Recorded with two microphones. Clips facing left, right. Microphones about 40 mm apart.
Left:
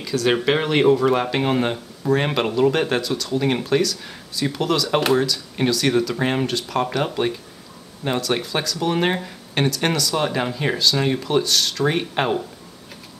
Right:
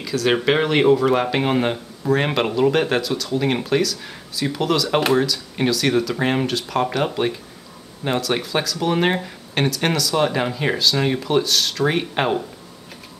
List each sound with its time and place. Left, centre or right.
0.0 s speech: centre